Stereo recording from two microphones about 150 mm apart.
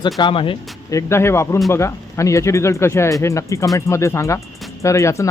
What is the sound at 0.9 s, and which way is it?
Speech, 20° left (ahead or behind).